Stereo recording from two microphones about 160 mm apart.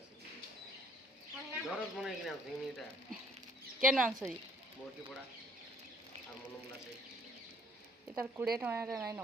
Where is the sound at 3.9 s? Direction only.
5° right (ahead or behind).